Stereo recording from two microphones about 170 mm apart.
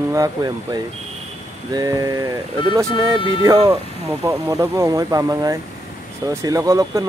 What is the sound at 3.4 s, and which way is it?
Speech, 20° right (ahead or behind).